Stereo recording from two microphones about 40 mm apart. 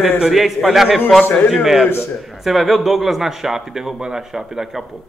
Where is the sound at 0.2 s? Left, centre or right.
Centre.